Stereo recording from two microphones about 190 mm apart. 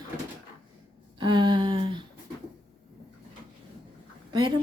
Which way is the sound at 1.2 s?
25° right (ahead or behind).